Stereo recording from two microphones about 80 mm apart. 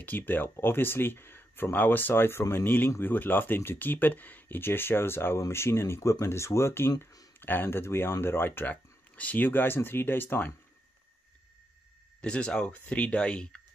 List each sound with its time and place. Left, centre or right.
0.0 s speech: left
12.2 s speech: centre